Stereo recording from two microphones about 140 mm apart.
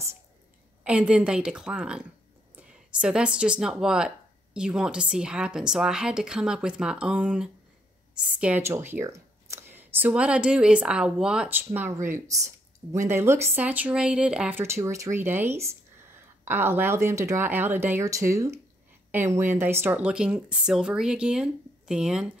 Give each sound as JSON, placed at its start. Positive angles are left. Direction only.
{"t": 0.8, "sound": "a woman's voice", "side_deg": -10}
{"t": 14.6, "sound": "speech", "side_deg": -20}